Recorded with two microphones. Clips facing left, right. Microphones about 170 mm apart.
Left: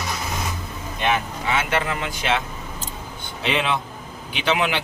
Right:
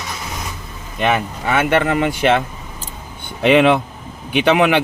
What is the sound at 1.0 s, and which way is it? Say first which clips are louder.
Speech: right 5 dB; 55° right (ahead or behind).